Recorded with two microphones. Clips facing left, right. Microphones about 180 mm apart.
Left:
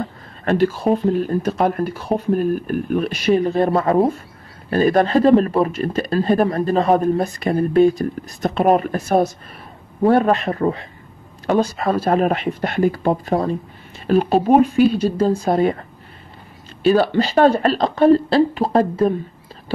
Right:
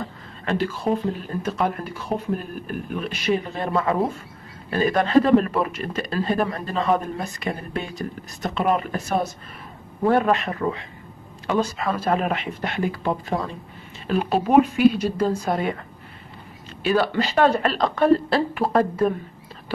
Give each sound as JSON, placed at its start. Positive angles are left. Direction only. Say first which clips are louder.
{"t": 0.0, "sound": "a sound", "louder": "left 6 dB", "side_deg": 40}
{"t": 1.4, "sound": "speech", "louder": "left 6 dB", "side_deg": 45}
{"t": 16.8, "sound": "speech", "louder": "left 6 dB", "side_deg": 30}